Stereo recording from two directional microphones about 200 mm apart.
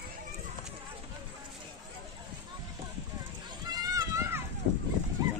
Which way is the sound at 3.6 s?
20° right (ahead or behind).